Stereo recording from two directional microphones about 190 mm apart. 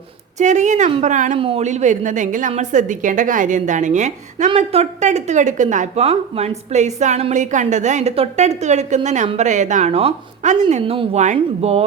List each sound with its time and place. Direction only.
0.3 s a woman's voice: 40° right (ahead or behind)